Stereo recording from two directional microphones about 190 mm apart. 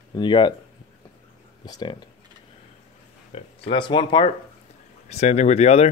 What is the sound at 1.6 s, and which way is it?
Speech, 20° left (ahead or behind).